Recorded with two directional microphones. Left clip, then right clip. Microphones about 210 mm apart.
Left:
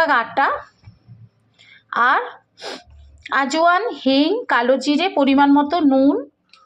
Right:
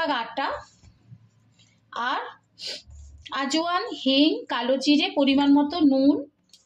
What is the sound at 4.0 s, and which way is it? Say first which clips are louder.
A woman's voice: left 4 dB; 10° left (ahead or behind).